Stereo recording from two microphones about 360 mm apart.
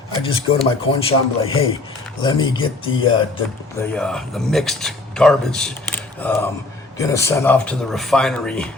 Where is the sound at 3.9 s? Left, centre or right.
Centre.